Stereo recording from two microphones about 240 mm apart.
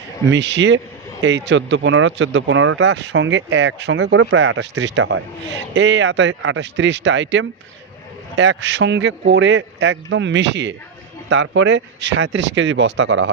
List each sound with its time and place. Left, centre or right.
0.3 s speech: right